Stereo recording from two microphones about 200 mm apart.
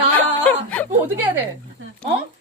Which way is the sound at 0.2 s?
10° left (ahead or behind).